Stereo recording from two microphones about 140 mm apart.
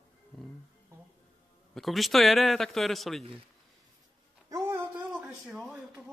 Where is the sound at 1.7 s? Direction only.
Centre (ahead or behind).